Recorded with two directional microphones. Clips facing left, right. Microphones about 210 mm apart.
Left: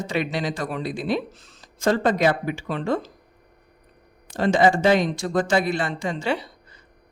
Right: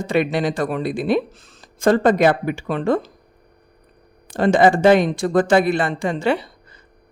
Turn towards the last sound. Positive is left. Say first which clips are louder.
# right 5 dB
turn(degrees=-55)  # may be behind; listen again after turning